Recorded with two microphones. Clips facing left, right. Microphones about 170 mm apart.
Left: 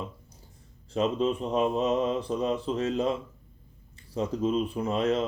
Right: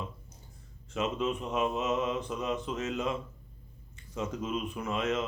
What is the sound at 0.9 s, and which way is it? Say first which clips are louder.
Speech: left 5 dB; 35° left (ahead or behind).